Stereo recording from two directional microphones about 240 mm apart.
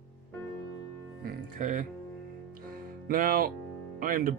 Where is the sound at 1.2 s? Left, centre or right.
Right.